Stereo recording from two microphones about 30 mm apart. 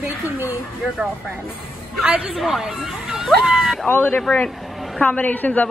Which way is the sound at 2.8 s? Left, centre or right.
Centre.